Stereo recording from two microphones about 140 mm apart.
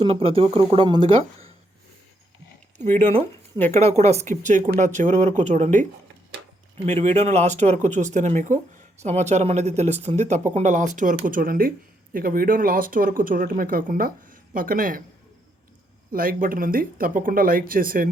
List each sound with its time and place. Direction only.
0.0 s speech: 40° right (ahead or behind)
3.8 s a woman's voice: 50° right (ahead or behind); by 11.2 s 65° right (ahead or behind)
11.3 s speech: 85° right
16.1 s speech: 80° right